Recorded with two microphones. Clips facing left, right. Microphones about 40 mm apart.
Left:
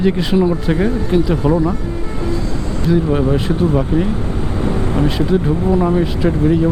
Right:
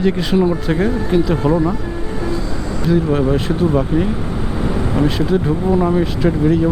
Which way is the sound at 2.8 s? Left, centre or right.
Centre.